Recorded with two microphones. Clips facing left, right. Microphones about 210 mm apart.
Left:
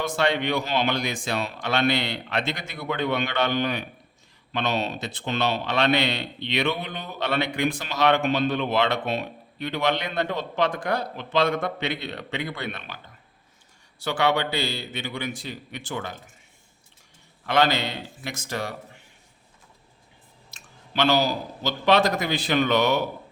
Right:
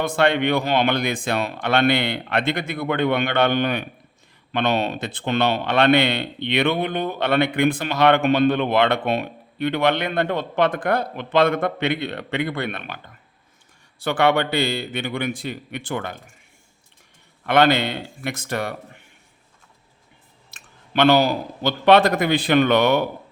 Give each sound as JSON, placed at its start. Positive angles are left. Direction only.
{"t": 0.0, "sound": "a man's voice", "side_deg": -55}
{"t": 14.0, "sound": "a man's voice", "side_deg": -55}
{"t": 17.4, "sound": "a man's voice", "side_deg": -60}
{"t": 20.5, "sound": "a man's voice", "side_deg": -55}